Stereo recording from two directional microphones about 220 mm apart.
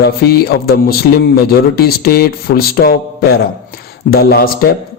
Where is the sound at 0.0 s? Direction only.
45° left (ahead or behind).